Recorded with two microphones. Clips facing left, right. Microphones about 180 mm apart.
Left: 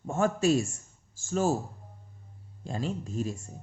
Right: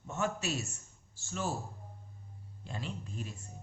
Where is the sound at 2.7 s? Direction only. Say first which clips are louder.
Left 9 dB; 40° left (ahead or behind).